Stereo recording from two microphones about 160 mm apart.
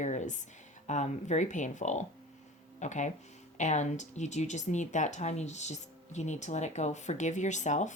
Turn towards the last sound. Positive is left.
turn(degrees=50)  # may be behind; listen again after turning